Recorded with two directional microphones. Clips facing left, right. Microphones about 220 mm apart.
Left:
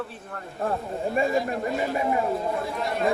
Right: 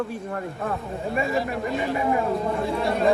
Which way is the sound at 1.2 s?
Centre (ahead or behind).